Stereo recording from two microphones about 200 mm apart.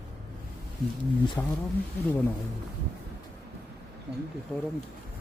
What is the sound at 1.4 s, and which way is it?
Speech, 15° left (ahead or behind).